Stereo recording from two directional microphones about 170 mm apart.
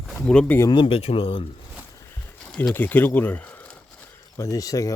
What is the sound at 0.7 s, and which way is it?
Speech, 30° left (ahead or behind).